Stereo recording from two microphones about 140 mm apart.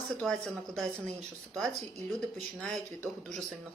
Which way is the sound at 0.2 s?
5° left (ahead or behind).